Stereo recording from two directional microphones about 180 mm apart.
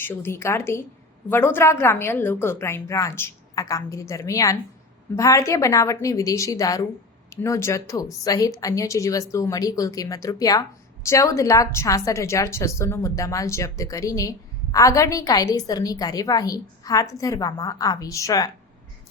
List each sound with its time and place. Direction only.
0.0 s a woman's voice: 10° left (ahead or behind)